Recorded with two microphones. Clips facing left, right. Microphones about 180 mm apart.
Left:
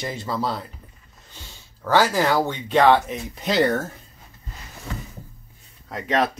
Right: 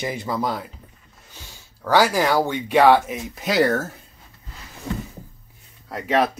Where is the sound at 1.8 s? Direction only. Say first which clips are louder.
Right 1 dB; 15° right (ahead or behind).